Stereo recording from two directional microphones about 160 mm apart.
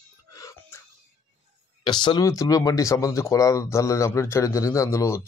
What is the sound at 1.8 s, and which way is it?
Speech, 25° left (ahead or behind).